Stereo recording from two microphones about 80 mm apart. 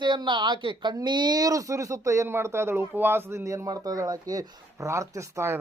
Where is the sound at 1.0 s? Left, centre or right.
Right.